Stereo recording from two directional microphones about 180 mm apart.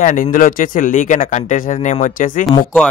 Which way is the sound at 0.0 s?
45° left (ahead or behind).